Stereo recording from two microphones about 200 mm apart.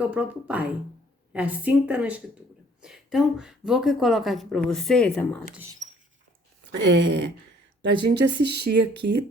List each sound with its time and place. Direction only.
0.1 s a woman's voice: 5° right (ahead or behind)
6.7 s speech: 60° right (ahead or behind)